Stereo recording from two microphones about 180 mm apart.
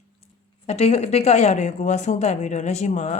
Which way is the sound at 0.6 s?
35° left (ahead or behind).